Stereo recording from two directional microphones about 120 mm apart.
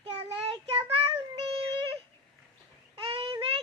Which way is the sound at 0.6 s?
55° right (ahead or behind).